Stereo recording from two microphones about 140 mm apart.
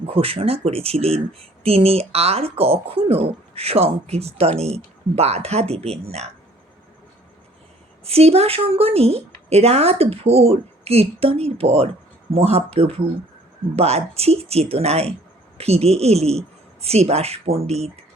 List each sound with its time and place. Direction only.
0.1 s speech: 40° right (ahead or behind)
8.0 s speech: 45° right (ahead or behind)